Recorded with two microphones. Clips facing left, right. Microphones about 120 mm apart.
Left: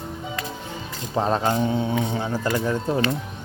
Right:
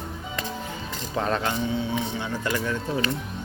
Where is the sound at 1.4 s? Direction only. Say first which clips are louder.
Left 4 dB; 40° left (ahead or behind).